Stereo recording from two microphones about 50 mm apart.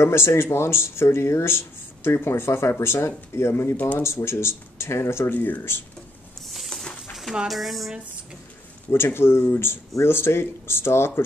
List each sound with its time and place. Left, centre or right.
0.0 s speech: left
6.5 s a sound: centre
7.4 s speech: centre
8.9 s speech: left